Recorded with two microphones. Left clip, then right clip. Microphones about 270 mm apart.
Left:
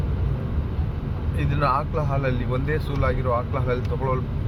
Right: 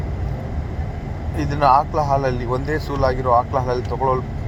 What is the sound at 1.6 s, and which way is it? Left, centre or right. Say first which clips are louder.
Speech: right 9 dB; centre.